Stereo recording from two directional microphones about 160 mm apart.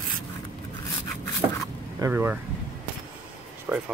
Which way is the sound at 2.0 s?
15° right (ahead or behind).